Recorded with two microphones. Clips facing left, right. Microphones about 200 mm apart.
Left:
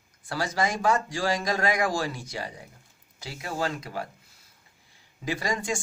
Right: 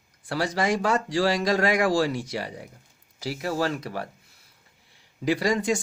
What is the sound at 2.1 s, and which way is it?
Speech, 80° right.